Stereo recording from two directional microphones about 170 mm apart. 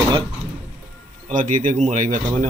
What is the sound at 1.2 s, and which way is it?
Speech, 50° right (ahead or behind).